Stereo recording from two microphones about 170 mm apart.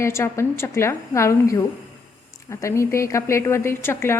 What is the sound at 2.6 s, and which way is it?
A woman's voice, 15° left (ahead or behind).